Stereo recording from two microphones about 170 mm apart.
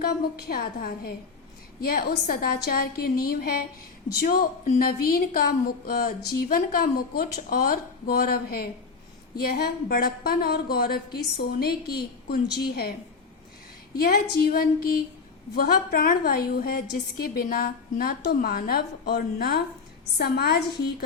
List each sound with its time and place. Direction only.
0.0 s a woman's voice: 65° left (ahead or behind)
14.0 s a woman's voice: 65° left (ahead or behind)